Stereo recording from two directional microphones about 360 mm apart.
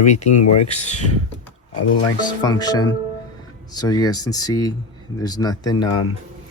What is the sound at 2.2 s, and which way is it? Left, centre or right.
Speech, centre.